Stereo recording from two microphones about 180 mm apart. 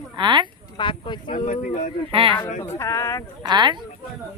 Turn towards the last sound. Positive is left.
turn(degrees=-25)  # may be behind; listen again after turning